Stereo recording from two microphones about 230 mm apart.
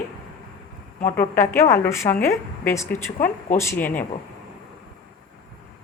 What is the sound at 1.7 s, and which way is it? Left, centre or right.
A woman's voice, centre.